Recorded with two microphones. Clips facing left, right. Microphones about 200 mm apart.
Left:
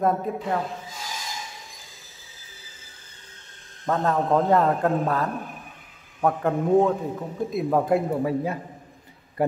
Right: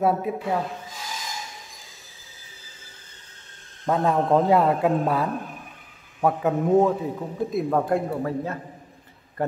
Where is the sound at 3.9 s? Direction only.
10° right (ahead or behind).